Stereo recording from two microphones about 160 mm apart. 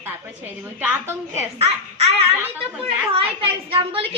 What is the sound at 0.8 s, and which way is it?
Speech, 15° right (ahead or behind).